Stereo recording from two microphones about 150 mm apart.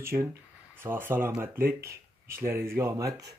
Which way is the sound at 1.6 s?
85° right.